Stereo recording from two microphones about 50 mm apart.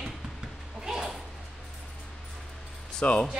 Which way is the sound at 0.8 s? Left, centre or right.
Centre.